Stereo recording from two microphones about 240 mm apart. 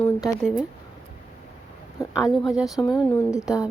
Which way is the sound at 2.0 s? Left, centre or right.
Centre.